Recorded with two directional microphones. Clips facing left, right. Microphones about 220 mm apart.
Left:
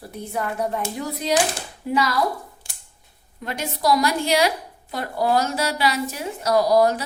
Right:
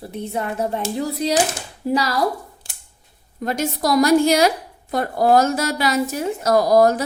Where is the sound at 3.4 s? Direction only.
45° right (ahead or behind).